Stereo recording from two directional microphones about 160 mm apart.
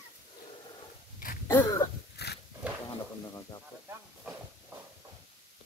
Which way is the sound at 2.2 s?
90° left.